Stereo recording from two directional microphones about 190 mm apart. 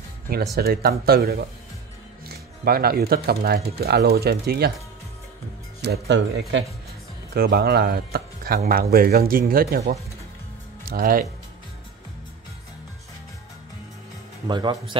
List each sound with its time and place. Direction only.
0.6 s speech: 55° right (ahead or behind)
5.8 s speech: 65° right (ahead or behind)
7.3 s speech: 55° right (ahead or behind)
14.5 s a man's voice: 25° right (ahead or behind)